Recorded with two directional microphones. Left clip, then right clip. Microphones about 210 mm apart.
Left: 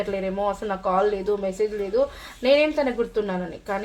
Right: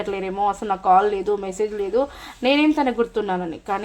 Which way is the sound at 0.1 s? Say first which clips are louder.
Right 3 dB; 35° right (ahead or behind).